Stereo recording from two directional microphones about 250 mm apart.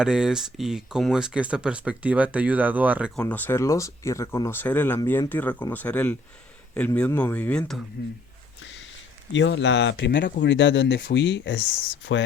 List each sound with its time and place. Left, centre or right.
0.0 s speech: centre
3.2 s speech: centre
8.0 s speech: left
8.6 s a sound: left
9.3 s speech: left